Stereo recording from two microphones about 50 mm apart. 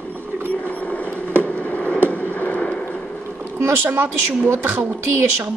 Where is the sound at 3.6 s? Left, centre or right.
Right.